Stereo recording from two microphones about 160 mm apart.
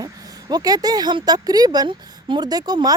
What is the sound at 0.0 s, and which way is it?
Speech, 25° right (ahead or behind).